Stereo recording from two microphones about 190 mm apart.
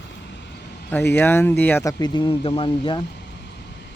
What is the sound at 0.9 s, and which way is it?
Speech, 10° left (ahead or behind).